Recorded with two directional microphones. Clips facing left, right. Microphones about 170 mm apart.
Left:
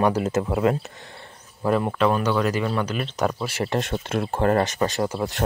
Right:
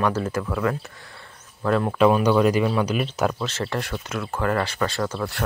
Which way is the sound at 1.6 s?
10° left (ahead or behind).